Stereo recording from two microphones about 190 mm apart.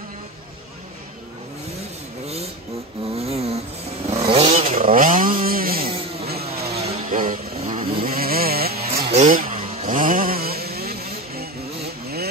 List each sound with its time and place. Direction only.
3.2 s a sound: 30° right (ahead or behind)
4.1 s chainsaw: 30° right (ahead or behind); by 5.9 s 50° right (ahead or behind)
6.7 s vehicle: 35° right (ahead or behind)
8.0 s chainsaw: 50° right (ahead or behind)
9.0 s chainsaw: 35° right (ahead or behind); by 11.4 s 55° right (ahead or behind)